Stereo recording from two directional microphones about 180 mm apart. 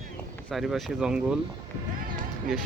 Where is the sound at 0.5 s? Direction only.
Centre (ahead or behind).